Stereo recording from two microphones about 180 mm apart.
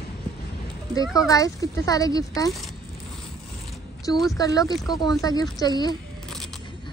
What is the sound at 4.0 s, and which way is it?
A woman's voice, 20° left (ahead or behind).